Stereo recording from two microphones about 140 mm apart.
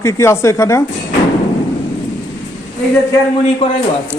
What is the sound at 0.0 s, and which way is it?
Speech, 20° left (ahead or behind).